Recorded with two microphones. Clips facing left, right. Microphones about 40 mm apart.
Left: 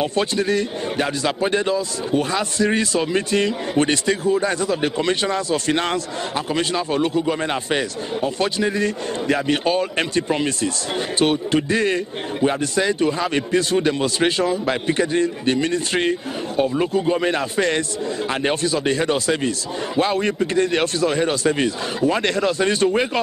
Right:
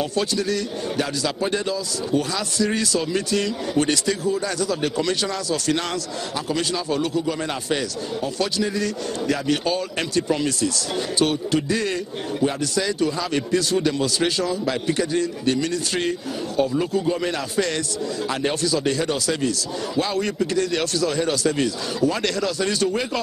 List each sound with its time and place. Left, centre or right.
0.0 s a man's voice: left